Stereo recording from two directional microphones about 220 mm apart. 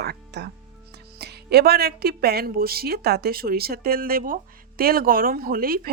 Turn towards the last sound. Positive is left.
turn(degrees=-40)  # may be behind; listen again after turning